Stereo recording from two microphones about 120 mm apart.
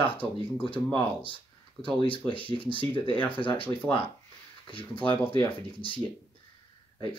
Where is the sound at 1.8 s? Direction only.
45° left (ahead or behind).